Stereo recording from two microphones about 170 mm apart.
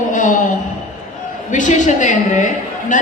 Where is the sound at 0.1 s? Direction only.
50° left (ahead or behind).